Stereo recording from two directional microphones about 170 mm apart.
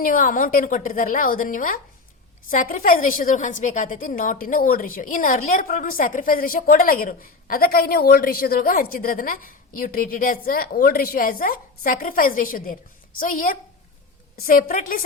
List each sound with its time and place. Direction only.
0.0 s a woman's voice: 55° left (ahead or behind)